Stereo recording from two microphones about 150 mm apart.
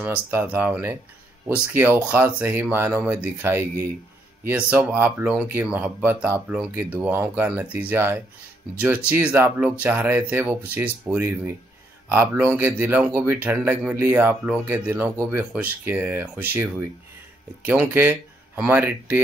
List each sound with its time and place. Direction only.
0.0 s speech: 15° right (ahead or behind)
17.6 s speech: 15° right (ahead or behind)